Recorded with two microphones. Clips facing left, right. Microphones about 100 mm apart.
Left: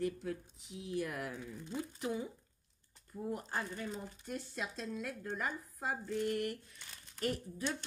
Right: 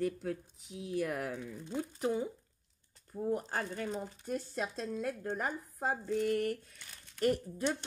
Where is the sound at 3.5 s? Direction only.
60° right (ahead or behind).